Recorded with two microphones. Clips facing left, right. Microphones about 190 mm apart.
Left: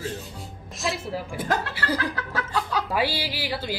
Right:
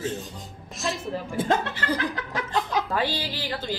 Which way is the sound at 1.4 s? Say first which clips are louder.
Right 5 dB; 25° right (ahead or behind).